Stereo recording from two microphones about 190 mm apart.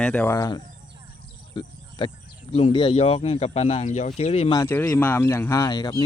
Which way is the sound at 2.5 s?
25° left (ahead or behind).